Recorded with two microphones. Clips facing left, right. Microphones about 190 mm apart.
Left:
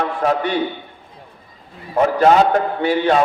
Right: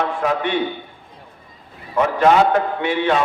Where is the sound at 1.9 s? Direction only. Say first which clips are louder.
Left 2 dB; 40° left (ahead or behind).